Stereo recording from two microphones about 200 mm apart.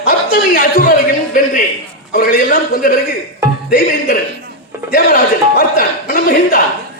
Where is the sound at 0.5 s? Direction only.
45° left (ahead or behind).